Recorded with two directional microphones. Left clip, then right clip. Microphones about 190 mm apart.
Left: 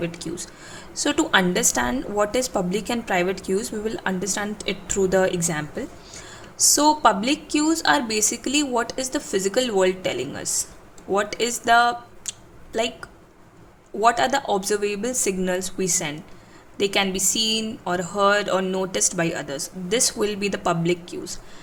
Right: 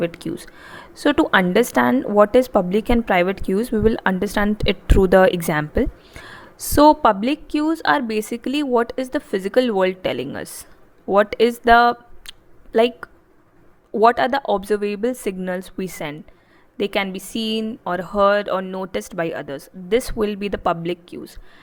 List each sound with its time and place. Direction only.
0.0 s a woman's voice: 40° right (ahead or behind)
11.6 s a sound: 40° right (ahead or behind)
14.0 s a woman's voice: 40° right (ahead or behind)